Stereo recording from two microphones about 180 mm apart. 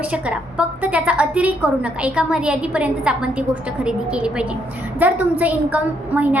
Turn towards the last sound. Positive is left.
turn(degrees=-10)  # may be behind; listen again after turning